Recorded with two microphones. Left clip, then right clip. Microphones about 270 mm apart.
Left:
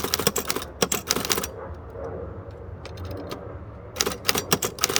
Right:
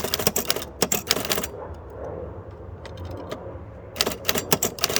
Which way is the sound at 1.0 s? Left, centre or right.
Centre.